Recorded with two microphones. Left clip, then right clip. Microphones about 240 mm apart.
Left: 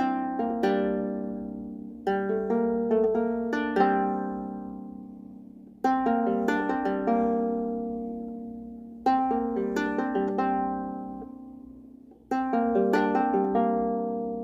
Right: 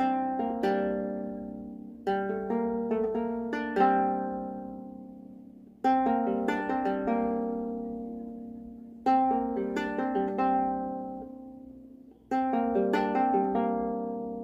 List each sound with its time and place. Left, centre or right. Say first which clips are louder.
0.0 s harp: even; left
2.0 s music: left 3 dB; left
5.8 s music: left 1 dB; left
9.0 s music: even; left
12.3 s music: left 2 dB; left